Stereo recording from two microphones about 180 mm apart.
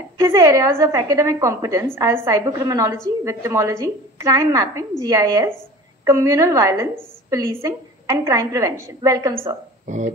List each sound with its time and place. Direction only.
0.2 s a woman's voice: 15° right (ahead or behind)
9.8 s speech: 40° right (ahead or behind)